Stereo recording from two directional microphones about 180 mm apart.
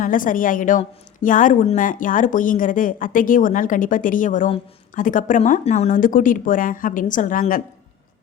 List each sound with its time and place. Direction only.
0.0 s a woman's voice: 50° left (ahead or behind)